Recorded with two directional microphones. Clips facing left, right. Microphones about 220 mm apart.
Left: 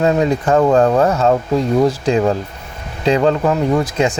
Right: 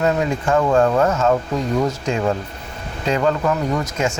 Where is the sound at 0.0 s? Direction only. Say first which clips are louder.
Left 4 dB; 35° left (ahead or behind).